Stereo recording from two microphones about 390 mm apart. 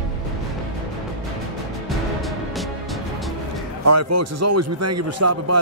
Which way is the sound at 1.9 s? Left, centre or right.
Centre.